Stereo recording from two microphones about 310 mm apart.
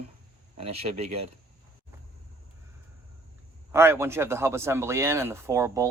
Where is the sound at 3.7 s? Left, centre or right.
Centre.